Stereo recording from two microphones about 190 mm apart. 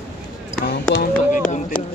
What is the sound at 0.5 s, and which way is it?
Speech, 55° left (ahead or behind).